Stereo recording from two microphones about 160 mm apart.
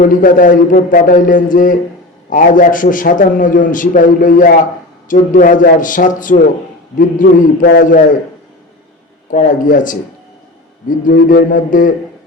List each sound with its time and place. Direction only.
0.0 s a man's voice: 60° left (ahead or behind)
9.3 s a man's voice: 55° left (ahead or behind)